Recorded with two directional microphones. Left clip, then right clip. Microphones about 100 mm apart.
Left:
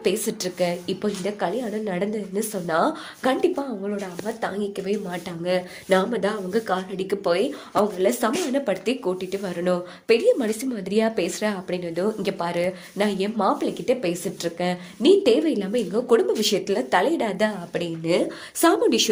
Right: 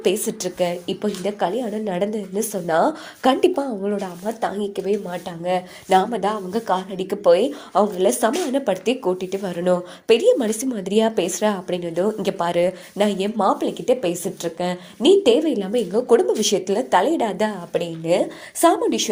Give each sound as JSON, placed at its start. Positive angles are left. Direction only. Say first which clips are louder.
{"t": 0.0, "sound": "speech", "louder": "right 3 dB", "side_deg": -20}
{"t": 3.4, "sound": "speech", "louder": "right 4 dB", "side_deg": -65}
{"t": 5.1, "sound": "a woman's voice", "louder": "right 2 dB", "side_deg": -5}
{"t": 5.9, "sound": "speech", "louder": "right 3 dB", "side_deg": -25}
{"t": 14.4, "sound": "a woman's voice", "louder": "right 1 dB", "side_deg": -10}